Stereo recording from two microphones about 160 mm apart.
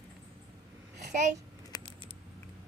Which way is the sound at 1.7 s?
25° left (ahead or behind).